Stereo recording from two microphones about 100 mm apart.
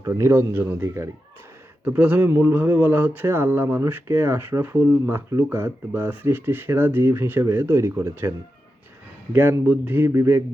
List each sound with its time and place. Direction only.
0.0 s speech: 30° right (ahead or behind)
9.3 s speech: 20° right (ahead or behind)